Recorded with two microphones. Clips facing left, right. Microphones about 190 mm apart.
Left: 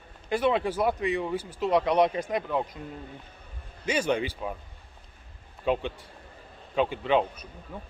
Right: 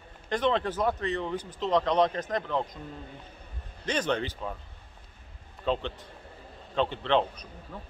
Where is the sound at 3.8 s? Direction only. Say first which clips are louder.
Left 2 dB; 10° left (ahead or behind).